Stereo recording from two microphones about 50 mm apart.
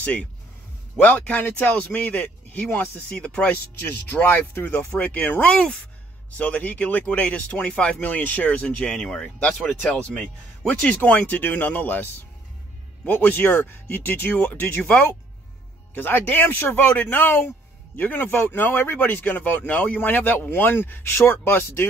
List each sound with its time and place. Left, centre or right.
0.0 s speech: left
3.2 s speech: left
3.4 s speech: left
4.6 s speech: left
8.0 s speech: left
8.6 s speech: left
9.8 s speech: left
15.9 s speech: left
21.0 s speech: left